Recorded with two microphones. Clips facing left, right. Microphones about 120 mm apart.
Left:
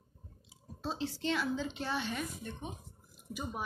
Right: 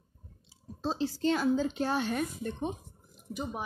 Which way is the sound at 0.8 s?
35° right (ahead or behind).